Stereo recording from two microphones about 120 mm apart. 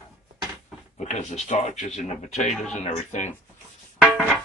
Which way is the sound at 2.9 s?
85° left.